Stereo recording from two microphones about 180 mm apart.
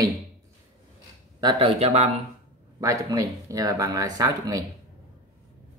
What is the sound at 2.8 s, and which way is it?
Speech, 20° right (ahead or behind).